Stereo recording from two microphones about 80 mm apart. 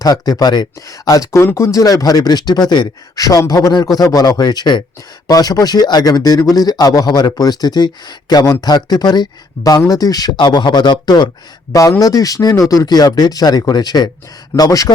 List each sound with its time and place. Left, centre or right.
0.0 s speech: left
1.4 s speech: left
5.3 s speech: left
10.3 s speech: left
11.7 s speech: left